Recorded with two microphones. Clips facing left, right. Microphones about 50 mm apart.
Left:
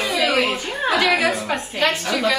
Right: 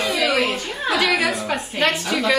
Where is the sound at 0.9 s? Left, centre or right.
Centre.